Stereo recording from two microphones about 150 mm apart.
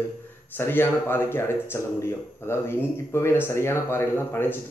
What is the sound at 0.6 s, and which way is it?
Speech, 15° left (ahead or behind).